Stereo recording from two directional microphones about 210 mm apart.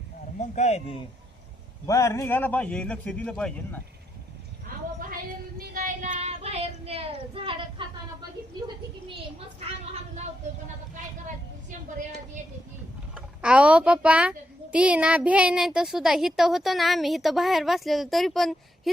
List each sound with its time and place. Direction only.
0.3 s speech: 35° left (ahead or behind)
1.9 s speech: 15° left (ahead or behind)
5.5 s child singing: 40° right (ahead or behind); by 7.9 s 25° right (ahead or behind)
9.6 s vehicle: 30° right (ahead or behind)
13.1 s a child's voice: 5° right (ahead or behind)